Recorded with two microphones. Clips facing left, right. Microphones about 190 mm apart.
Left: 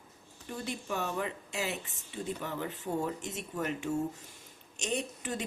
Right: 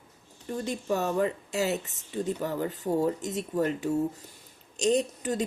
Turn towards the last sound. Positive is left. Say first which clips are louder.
# right 8 dB
turn(degrees=-40)  # may be behind; listen again after turning